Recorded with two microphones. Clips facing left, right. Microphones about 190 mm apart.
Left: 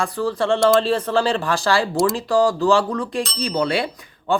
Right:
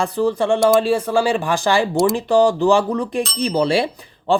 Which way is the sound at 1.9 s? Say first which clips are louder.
Right 3 dB; centre (ahead or behind).